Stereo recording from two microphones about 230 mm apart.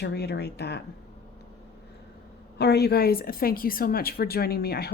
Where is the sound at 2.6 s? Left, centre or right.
Left.